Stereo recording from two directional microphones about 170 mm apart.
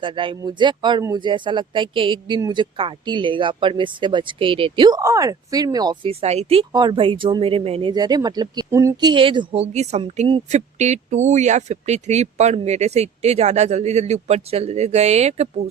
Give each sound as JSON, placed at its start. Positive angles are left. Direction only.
{"t": 0.0, "sound": "speech", "side_deg": -30}
{"t": 10.5, "sound": "speech", "side_deg": -40}